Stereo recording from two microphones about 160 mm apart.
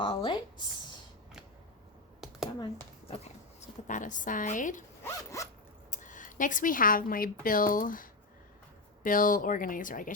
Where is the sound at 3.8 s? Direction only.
55° left (ahead or behind).